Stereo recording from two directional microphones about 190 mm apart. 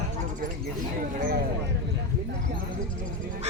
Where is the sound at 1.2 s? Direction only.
50° right (ahead or behind).